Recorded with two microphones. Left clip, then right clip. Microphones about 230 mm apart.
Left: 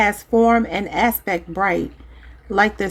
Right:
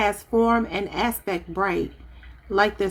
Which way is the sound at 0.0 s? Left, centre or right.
Left.